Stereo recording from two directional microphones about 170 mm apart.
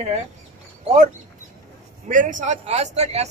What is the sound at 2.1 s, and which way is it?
A man's voice, 50° right (ahead or behind).